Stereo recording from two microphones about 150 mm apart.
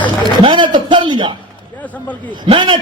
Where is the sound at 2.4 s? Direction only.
35° right (ahead or behind).